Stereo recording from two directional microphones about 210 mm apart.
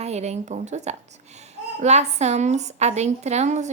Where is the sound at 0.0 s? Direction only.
30° right (ahead or behind).